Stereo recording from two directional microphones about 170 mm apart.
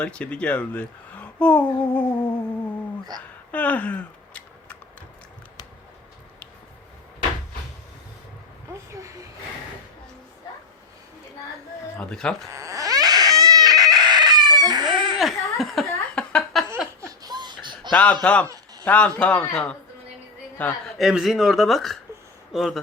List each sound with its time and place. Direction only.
0.0 s speech: 5° left (ahead or behind)
3.5 s a sound: 10° left (ahead or behind)
8.9 s vehicle: 20° right (ahead or behind)
11.9 s speech: 5° left (ahead or behind)
12.5 s baby cry: 20° right (ahead or behind)
15.2 s chuckle: centre (ahead or behind)
16.1 s laughter: 5° left (ahead or behind)
17.0 s baby laughter: 20° right (ahead or behind)
17.9 s speech: 5° left (ahead or behind)
18.4 s a sound: 20° right (ahead or behind)
18.9 s speech: 5° left (ahead or behind)
21.0 s speech: centre (ahead or behind)